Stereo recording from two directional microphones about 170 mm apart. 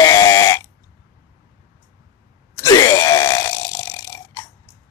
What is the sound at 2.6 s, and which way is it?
Burping, 20° left (ahead or behind).